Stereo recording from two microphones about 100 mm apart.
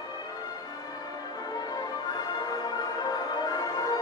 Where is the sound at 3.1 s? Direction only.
45° left (ahead or behind).